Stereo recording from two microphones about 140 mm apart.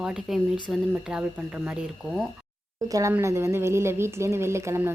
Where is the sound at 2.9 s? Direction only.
20° right (ahead or behind).